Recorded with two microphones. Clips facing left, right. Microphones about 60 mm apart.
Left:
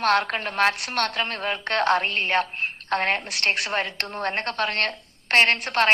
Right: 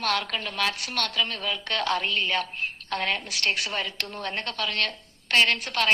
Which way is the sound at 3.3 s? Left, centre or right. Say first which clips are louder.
Left 3 dB; left.